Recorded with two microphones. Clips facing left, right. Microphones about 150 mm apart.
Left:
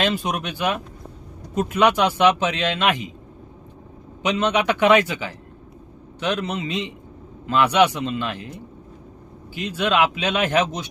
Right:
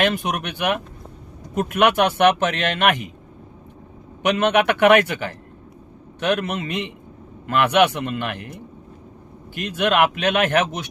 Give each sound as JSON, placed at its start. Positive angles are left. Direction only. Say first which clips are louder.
{"t": 0.0, "sound": "a man's voice", "louder": "right 1 dB", "side_deg": -60}
{"t": 4.2, "sound": "a man's voice", "louder": "right 3 dB", "side_deg": -55}
{"t": 9.6, "sound": "a man's voice", "louder": "right 2 dB", "side_deg": -55}